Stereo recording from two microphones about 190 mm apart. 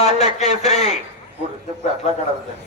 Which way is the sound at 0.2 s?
35° left (ahead or behind).